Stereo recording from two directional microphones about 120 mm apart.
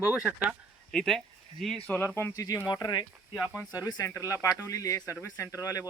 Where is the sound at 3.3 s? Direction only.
5° left (ahead or behind).